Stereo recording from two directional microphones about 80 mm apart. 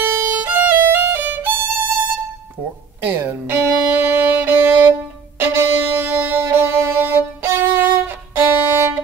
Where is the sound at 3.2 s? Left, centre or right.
Right.